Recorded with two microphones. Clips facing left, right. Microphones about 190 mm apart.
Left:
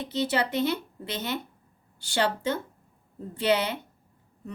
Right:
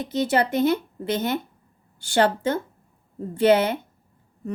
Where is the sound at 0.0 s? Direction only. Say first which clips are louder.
Right 5 dB; 50° right (ahead or behind).